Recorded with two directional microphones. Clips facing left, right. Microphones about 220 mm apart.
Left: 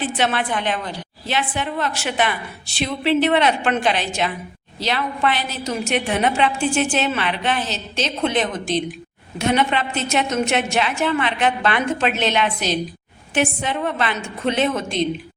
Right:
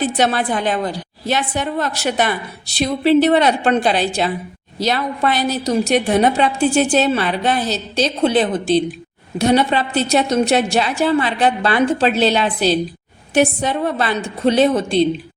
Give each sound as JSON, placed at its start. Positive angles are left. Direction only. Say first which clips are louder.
{"t": 0.0, "sound": "a woman's voice", "louder": "right 4 dB", "side_deg": -40}